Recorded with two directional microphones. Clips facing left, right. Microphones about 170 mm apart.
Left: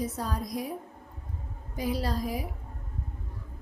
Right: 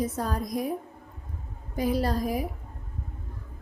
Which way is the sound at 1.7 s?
50° right (ahead or behind).